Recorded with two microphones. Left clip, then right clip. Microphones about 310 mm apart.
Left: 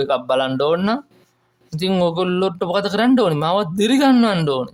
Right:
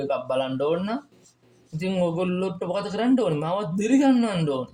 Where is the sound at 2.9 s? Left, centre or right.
Left.